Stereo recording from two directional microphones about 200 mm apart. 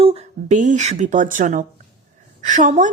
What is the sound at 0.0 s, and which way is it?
A woman's voice, 30° right (ahead or behind).